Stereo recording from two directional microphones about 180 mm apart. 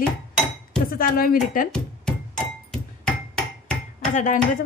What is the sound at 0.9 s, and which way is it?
Speech, 55° left (ahead or behind).